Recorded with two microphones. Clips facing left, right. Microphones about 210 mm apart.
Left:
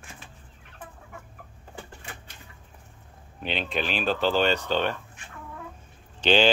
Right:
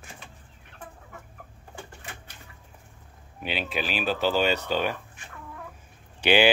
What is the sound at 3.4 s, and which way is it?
Speech, 10° right (ahead or behind).